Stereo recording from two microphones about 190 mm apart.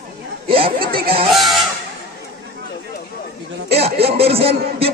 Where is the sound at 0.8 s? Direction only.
55° right (ahead or behind).